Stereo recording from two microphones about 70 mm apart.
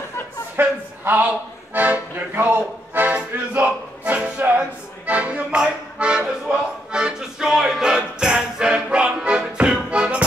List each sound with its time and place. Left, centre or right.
0.6 s music: right